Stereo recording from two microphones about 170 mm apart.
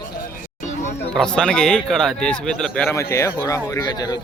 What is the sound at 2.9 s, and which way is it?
Speech, 15° left (ahead or behind).